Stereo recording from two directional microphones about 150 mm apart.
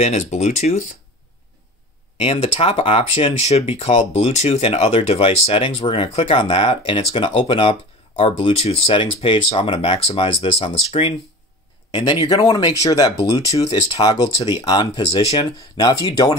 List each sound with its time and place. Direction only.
0.0 s speech: 50° left (ahead or behind)
2.1 s speech: 40° left (ahead or behind)
11.9 s speech: 30° left (ahead or behind)
14.4 s speech: 25° left (ahead or behind)